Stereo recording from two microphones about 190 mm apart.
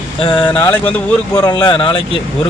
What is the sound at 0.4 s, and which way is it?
Speech, 10° left (ahead or behind).